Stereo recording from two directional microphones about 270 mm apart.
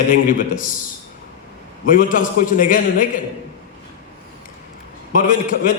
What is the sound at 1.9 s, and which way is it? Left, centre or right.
A man's voice, left.